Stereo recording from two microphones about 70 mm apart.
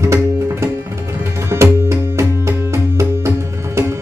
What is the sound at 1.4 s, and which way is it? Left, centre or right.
Music, right.